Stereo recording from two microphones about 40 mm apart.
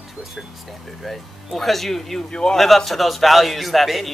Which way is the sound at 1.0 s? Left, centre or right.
Centre.